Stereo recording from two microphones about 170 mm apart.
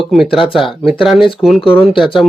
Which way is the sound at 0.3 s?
30° left (ahead or behind).